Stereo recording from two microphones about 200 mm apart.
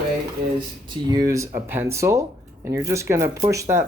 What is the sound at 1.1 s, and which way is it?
Speech, 15° right (ahead or behind).